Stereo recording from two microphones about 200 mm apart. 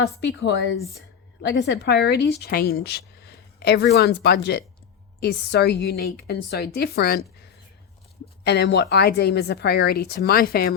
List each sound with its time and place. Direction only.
0.0 s a woman's voice: 60° left (ahead or behind)
8.4 s a woman's voice: 55° left (ahead or behind)